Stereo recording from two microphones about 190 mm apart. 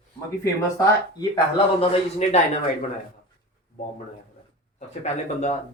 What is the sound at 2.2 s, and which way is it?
Speech, 40° left (ahead or behind).